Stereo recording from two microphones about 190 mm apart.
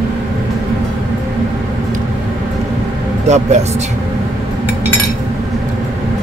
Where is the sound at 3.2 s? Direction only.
35° right (ahead or behind).